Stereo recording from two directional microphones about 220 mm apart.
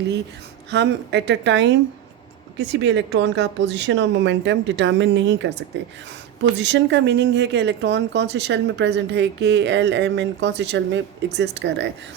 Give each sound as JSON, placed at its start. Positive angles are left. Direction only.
{"t": 0.7, "sound": "speech", "side_deg": -50}